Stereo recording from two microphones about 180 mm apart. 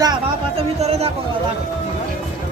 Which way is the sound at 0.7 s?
35° right (ahead or behind).